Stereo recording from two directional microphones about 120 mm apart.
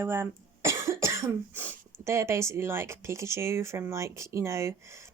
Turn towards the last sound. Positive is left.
turn(degrees=-25)  # may be behind; listen again after turning